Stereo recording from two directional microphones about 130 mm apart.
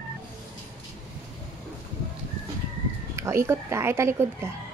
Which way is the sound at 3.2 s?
20° right (ahead or behind).